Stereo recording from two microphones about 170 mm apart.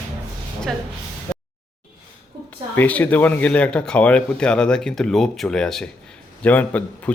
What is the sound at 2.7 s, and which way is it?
A man's voice, 10° left (ahead or behind).